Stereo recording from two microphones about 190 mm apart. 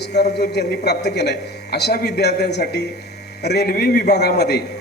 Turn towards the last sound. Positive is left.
turn(degrees=60)  # may be behind; listen again after turning